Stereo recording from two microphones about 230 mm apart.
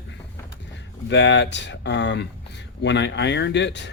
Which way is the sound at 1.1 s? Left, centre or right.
Left.